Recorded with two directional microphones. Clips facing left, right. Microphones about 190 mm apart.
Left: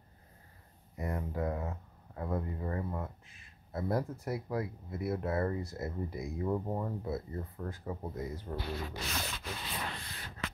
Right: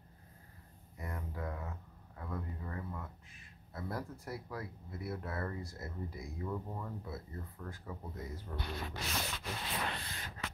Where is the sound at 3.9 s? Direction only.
20° left (ahead or behind).